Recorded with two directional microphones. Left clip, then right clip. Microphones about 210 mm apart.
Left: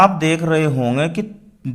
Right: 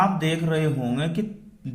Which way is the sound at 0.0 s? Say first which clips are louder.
Left 9 dB; 35° left (ahead or behind).